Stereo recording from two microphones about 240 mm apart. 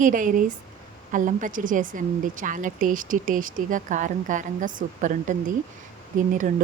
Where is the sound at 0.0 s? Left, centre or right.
Right.